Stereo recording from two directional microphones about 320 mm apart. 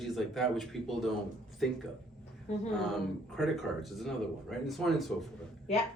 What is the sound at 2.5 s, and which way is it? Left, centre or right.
Speech, left.